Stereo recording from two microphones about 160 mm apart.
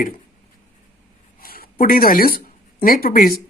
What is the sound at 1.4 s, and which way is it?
Speech, 65° left (ahead or behind).